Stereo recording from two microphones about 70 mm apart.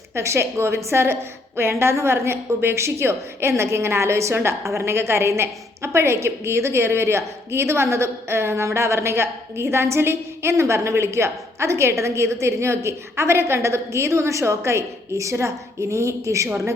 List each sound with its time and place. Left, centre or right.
0.1 s a woman's voice: right